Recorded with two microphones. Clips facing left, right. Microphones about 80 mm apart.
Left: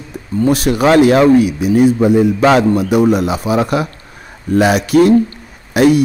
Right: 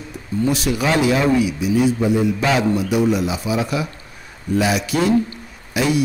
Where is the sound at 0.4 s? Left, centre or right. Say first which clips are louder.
Left 7 dB; left.